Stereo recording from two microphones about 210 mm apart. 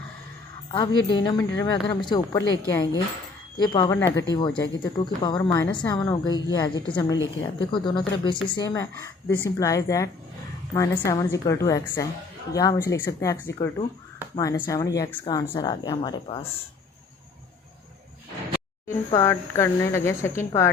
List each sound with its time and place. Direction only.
0.7 s a woman's voice: 20° left (ahead or behind)
19.1 s a woman's voice: 15° left (ahead or behind)